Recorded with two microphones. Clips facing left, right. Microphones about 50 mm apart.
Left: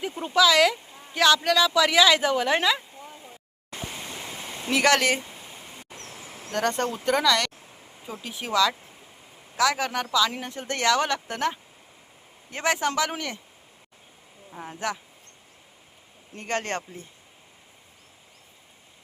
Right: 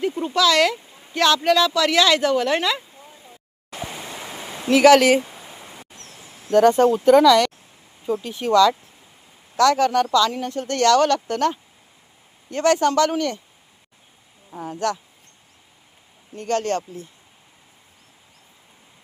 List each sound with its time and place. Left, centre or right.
0.0 s speech: centre
3.8 s stream: right
4.7 s speech: centre
5.4 s a sound: right
6.5 s speech: centre
14.6 s speech: centre
16.3 s speech: left